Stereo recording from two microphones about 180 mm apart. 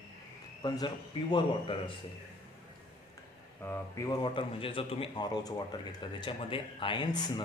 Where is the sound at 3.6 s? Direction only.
15° left (ahead or behind).